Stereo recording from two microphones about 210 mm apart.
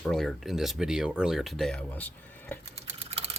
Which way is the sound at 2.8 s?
30° right (ahead or behind).